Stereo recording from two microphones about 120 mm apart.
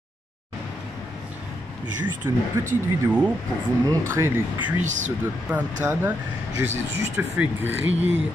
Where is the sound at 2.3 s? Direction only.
25° right (ahead or behind).